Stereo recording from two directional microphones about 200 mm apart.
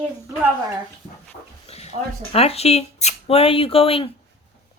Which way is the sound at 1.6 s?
30° left (ahead or behind).